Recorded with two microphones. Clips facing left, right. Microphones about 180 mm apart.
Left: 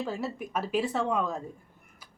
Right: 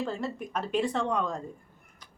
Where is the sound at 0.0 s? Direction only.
5° left (ahead or behind).